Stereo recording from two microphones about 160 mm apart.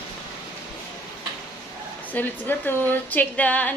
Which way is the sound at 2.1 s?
10° left (ahead or behind).